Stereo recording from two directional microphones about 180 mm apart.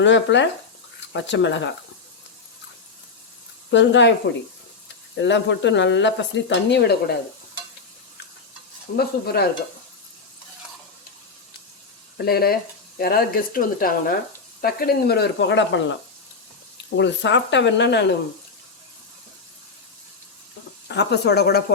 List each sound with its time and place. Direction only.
0.0 s speech: 90° left
3.7 s speech: 90° left
5.1 s speech: 80° left
9.0 s speech: 60° left (ahead or behind)
12.1 s speech: 60° left (ahead or behind)
20.8 s speech: 75° left (ahead or behind)